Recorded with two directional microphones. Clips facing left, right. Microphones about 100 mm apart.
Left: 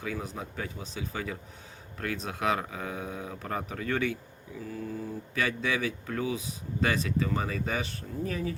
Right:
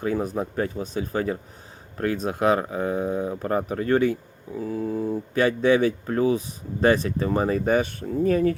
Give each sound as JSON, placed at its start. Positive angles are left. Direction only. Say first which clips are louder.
{"t": 0.0, "sound": "speech", "louder": "right 11 dB", "side_deg": -45}
{"t": 4.7, "sound": "mantra", "louder": "right 9 dB", "side_deg": -60}
{"t": 5.4, "sound": "speech", "louder": "right 11 dB", "side_deg": -35}